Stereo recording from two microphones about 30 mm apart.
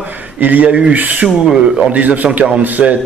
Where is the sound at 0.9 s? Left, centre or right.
Right.